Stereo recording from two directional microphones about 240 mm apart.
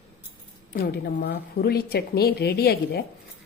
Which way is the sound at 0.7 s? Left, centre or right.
Left.